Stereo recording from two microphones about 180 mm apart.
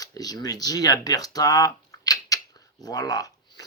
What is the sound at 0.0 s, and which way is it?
Speech, 20° left (ahead or behind).